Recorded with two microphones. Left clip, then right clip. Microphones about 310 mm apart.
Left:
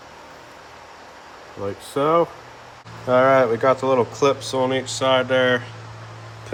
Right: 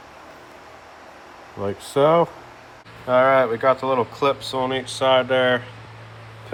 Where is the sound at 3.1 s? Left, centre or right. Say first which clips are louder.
Left 1 dB; centre.